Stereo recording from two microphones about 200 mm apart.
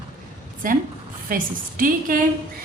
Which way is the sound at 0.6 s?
45° right (ahead or behind).